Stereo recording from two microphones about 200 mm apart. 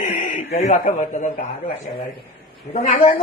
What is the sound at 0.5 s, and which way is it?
A man's voice, 35° left (ahead or behind).